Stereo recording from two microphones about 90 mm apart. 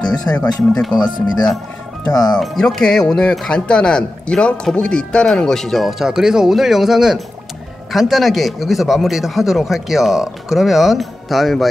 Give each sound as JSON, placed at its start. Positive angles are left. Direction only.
{"t": 0.3, "sound": "speech", "side_deg": 25}
{"t": 0.8, "sound": "a man's voice", "side_deg": 0}
{"t": 2.0, "sound": "speech", "side_deg": 40}
{"t": 2.4, "sound": "a man's voice", "side_deg": 0}